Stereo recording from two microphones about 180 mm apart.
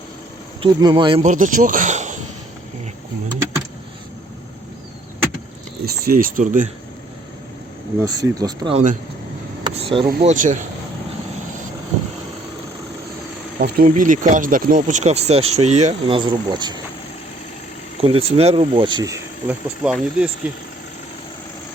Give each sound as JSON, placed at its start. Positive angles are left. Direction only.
{"t": 0.6, "sound": "speech", "side_deg": -25}
{"t": 1.2, "sound": "a man's voice", "side_deg": -45}
{"t": 5.8, "sound": "speech", "side_deg": -55}
{"t": 8.0, "sound": "speech", "side_deg": -20}
{"t": 8.7, "sound": "speech", "side_deg": -45}
{"t": 9.6, "sound": "a sound", "side_deg": -30}
{"t": 10.2, "sound": "speech", "side_deg": -45}
{"t": 13.6, "sound": "speech", "side_deg": -50}
{"t": 18.0, "sound": "speech", "side_deg": -35}
{"t": 19.8, "sound": "speech", "side_deg": -5}